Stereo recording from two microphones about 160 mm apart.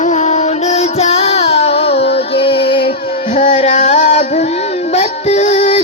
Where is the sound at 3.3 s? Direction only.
50° left (ahead or behind).